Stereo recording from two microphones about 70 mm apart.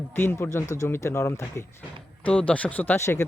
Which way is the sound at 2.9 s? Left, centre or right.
Left.